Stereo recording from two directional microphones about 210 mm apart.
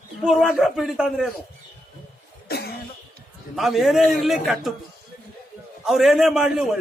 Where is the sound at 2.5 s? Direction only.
50° left (ahead or behind).